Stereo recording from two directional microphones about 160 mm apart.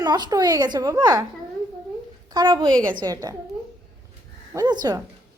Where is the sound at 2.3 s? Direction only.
25° right (ahead or behind).